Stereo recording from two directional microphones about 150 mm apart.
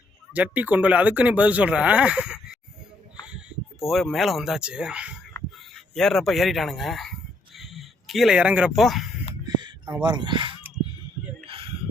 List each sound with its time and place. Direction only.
0.3 s speech: 10° right (ahead or behind)
3.8 s a man's voice: centre (ahead or behind)
9.2 s a sound: 30° right (ahead or behind)
9.9 s speech: 30° right (ahead or behind)